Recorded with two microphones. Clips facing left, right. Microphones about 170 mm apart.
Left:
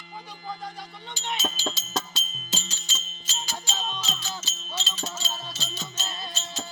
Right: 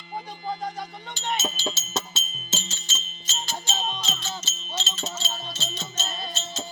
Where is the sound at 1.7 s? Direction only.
25° right (ahead or behind).